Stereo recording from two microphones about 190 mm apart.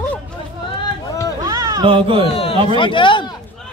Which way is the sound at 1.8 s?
30° right (ahead or behind).